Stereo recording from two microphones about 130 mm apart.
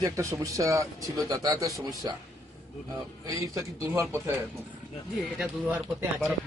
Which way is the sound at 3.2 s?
25° right (ahead or behind).